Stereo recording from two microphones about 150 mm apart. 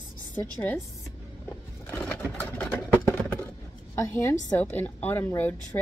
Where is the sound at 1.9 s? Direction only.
10° left (ahead or behind).